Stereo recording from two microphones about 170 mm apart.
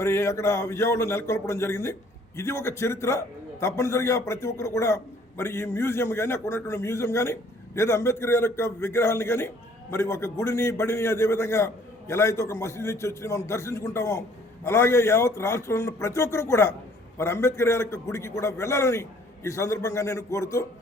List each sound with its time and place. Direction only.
0.0 s speech: 15° left (ahead or behind)